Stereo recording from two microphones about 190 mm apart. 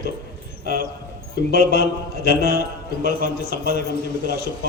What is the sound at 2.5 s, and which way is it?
Speech, 50° right (ahead or behind).